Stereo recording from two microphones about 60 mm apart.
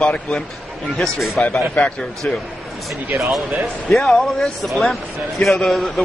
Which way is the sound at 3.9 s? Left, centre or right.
Centre.